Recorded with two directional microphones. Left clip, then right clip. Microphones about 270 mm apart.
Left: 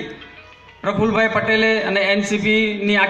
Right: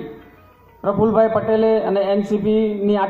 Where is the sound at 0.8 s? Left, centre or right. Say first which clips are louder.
Right 2 dB; left.